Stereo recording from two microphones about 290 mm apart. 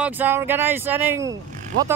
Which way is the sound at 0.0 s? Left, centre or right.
Centre.